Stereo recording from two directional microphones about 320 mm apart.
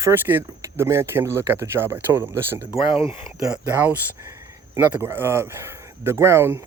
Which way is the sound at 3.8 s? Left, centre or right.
Centre.